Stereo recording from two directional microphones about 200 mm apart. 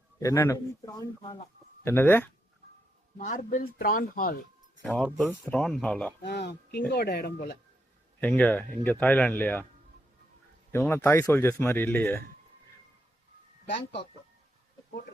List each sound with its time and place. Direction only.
0.2 s speech: 15° left (ahead or behind)
3.2 s speech: 40° left (ahead or behind)
4.8 s speech: 5° left (ahead or behind)
6.2 s speech: 55° left (ahead or behind)
8.2 s speech: 5° left (ahead or behind)
10.7 s speech: 10° left (ahead or behind)